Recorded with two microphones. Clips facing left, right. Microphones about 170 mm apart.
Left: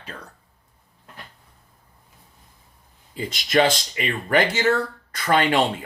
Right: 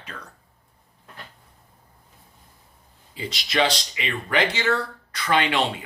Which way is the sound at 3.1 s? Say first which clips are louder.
Left 5 dB; 50° left (ahead or behind).